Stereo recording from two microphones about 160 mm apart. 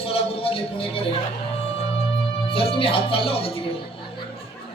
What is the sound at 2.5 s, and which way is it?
Speech, 35° left (ahead or behind).